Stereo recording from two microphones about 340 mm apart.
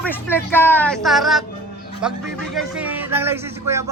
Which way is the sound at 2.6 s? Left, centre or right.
Centre.